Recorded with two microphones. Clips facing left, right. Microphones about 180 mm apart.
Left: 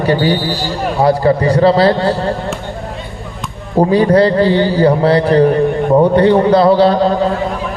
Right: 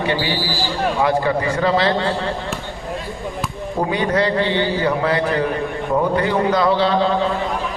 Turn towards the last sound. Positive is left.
turn(degrees=40)  # may be behind; listen again after turning